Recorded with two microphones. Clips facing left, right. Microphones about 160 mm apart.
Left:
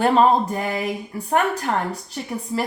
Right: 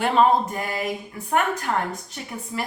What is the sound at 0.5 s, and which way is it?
Speech, 30° left (ahead or behind).